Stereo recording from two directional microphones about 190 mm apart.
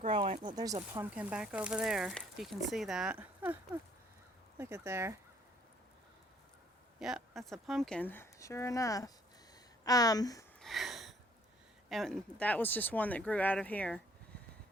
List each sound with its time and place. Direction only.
0.0 s speech: 30° right (ahead or behind)
1.1 s speech: 5° right (ahead or behind)
7.0 s speech: centre (ahead or behind); by 10.4 s 20° left (ahead or behind)
10.6 s a sound: centre (ahead or behind)
11.9 s speech: centre (ahead or behind)